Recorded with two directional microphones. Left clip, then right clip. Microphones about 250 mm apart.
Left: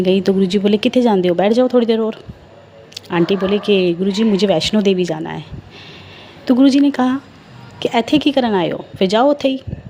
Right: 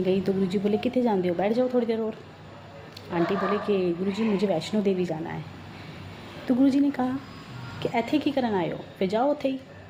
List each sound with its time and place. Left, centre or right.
0.0 s speech: left
6.4 s speech: left